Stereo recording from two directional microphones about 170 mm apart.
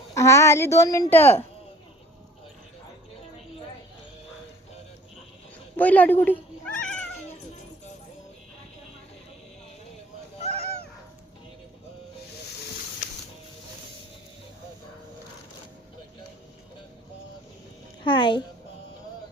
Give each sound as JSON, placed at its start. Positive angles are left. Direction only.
{"t": 0.1, "sound": "a woman's voice", "side_deg": 15}
{"t": 5.7, "sound": "speech", "side_deg": 10}
{"t": 6.8, "sound": "cat", "side_deg": 5}
{"t": 10.4, "sound": "goose", "side_deg": -40}
{"t": 18.0, "sound": "music", "side_deg": 25}